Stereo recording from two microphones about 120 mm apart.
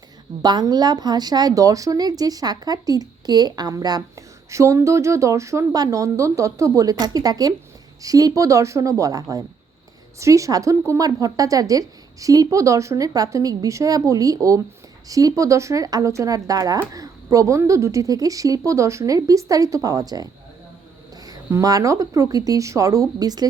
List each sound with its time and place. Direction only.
0.4 s a woman's voice: 35° right (ahead or behind)
21.2 s a woman's voice: 30° right (ahead or behind)